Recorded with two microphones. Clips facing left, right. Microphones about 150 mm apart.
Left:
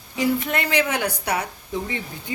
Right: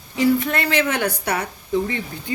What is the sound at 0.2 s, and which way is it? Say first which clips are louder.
Speech: right 4 dB; 15° left (ahead or behind).